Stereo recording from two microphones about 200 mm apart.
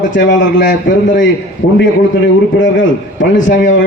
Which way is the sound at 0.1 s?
65° left (ahead or behind).